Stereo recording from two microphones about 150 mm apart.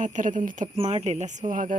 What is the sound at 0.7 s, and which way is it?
Speech, 45° right (ahead or behind).